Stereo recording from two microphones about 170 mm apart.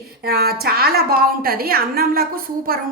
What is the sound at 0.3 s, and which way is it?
A woman's voice, 65° right (ahead or behind).